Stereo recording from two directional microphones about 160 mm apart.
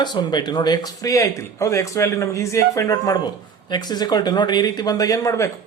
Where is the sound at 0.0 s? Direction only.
25° left (ahead or behind).